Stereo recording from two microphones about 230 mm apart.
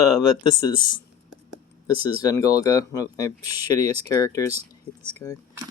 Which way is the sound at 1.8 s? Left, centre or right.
Centre.